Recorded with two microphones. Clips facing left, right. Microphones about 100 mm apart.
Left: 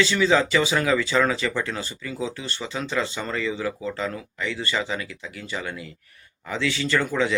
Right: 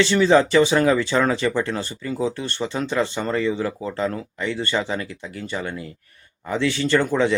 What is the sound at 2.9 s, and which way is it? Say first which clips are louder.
Speech: right 4 dB; 35° right (ahead or behind).